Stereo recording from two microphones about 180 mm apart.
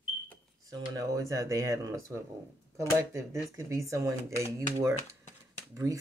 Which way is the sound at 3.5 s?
15° right (ahead or behind).